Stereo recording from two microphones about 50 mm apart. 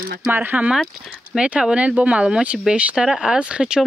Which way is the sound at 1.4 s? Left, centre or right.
Centre.